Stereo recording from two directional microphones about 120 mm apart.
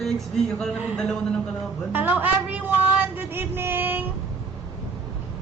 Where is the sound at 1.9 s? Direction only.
15° right (ahead or behind).